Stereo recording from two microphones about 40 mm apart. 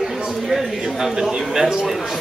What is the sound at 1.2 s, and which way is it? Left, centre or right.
Speech, centre.